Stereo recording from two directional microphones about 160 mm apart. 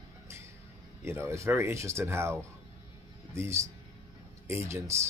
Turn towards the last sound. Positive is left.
turn(degrees=-15)  # may be behind; listen again after turning